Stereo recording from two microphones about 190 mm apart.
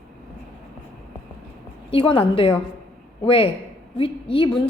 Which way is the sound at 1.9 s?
25° left (ahead or behind).